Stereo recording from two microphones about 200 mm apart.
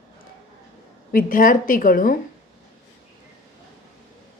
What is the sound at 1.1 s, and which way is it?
A woman's voice, 45° left (ahead or behind).